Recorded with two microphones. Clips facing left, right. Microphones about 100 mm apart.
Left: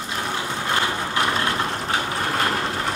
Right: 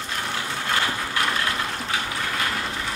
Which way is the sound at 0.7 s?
25° left (ahead or behind).